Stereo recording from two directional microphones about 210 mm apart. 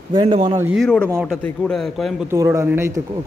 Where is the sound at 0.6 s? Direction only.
10° right (ahead or behind).